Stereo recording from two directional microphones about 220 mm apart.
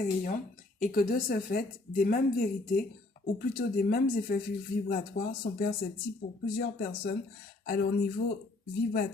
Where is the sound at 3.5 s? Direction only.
40° left (ahead or behind).